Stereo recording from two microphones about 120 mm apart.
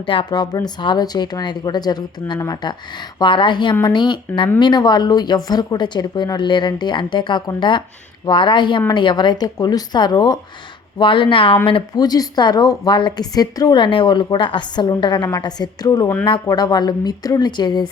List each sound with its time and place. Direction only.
0.0 s a woman's voice: 45° left (ahead or behind)